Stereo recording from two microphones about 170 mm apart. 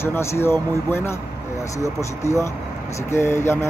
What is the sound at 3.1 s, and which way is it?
Speech, 15° left (ahead or behind).